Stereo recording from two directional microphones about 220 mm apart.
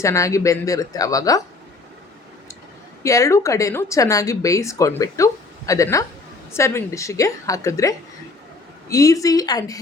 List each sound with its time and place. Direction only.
0.0 s speech: 15° left (ahead or behind)
3.0 s speech: 15° left (ahead or behind)